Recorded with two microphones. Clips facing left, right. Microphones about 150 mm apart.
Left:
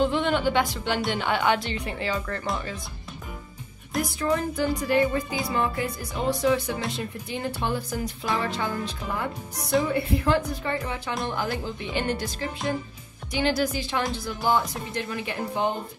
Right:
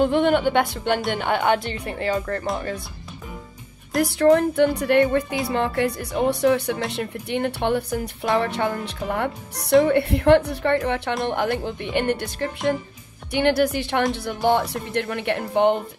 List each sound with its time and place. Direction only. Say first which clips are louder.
0.0 s speech: right 5 dB; 55° right (ahead or behind); by 2.4 s 40° right (ahead or behind)
4.0 s a woman's voice: right 10 dB; 70° right (ahead or behind)